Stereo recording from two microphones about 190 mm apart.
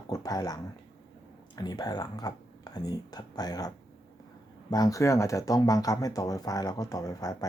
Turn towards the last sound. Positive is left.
turn(degrees=20)  # may be behind; listen again after turning